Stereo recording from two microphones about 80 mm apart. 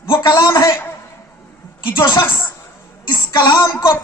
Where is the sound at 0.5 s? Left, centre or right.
Left.